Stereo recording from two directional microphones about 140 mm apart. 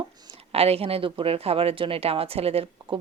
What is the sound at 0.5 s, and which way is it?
Speech, 45° right (ahead or behind).